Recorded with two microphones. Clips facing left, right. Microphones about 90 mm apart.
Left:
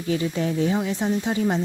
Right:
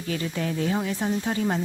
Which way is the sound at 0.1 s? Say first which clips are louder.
Left 5 dB; 25° left (ahead or behind).